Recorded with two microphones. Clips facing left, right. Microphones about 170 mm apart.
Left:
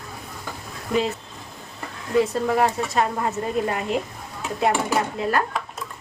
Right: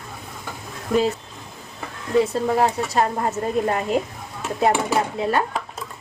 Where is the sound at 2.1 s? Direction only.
Centre (ahead or behind).